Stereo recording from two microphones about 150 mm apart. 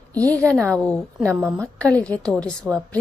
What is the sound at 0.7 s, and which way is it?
Speech, 10° left (ahead or behind).